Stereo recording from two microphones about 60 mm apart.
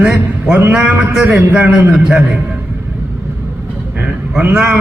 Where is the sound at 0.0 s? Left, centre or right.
Centre.